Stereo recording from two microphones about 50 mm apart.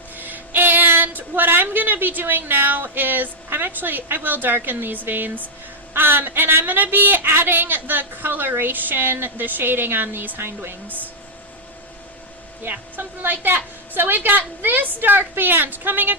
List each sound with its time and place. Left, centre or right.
0.2 s a woman's voice: right
12.7 s a woman's voice: right